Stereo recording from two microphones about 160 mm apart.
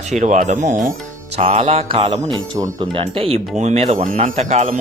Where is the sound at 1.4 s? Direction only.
40° right (ahead or behind).